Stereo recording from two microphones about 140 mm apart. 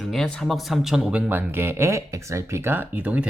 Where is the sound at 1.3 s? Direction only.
15° right (ahead or behind).